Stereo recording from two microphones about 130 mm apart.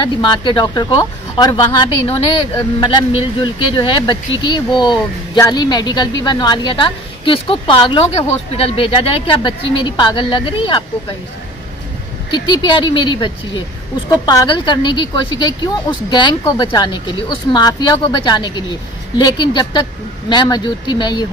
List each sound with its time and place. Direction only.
0.0 s speech: 35° left (ahead or behind)
8.0 s speech: 50° left (ahead or behind)
12.3 s speech: 35° left (ahead or behind)